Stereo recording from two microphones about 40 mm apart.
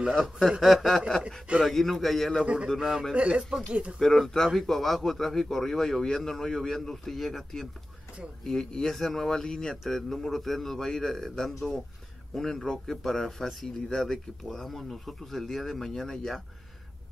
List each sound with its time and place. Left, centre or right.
0.1 s speech: centre
2.4 s speech: right
2.8 s a man's voice: centre
3.2 s speech: right
4.0 s speech: centre